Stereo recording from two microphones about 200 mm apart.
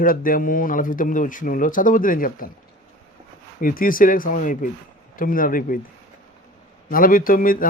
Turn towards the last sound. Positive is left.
turn(degrees=45)  # may be behind; listen again after turning